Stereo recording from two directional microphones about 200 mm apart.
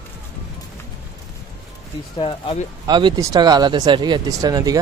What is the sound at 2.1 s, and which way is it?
Speech, 30° left (ahead or behind).